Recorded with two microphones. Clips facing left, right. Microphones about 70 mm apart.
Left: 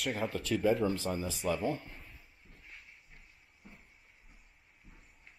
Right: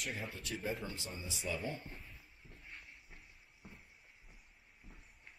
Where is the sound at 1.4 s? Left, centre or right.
Left.